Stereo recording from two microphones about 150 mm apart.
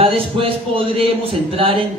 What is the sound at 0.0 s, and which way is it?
Speech, 40° right (ahead or behind).